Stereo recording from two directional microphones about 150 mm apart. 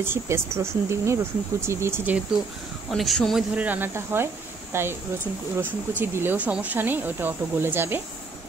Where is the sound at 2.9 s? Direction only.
Centre (ahead or behind); by 4.9 s 15° right (ahead or behind).